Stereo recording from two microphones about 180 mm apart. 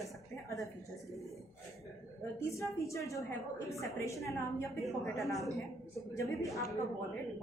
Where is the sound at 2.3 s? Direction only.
15° left (ahead or behind).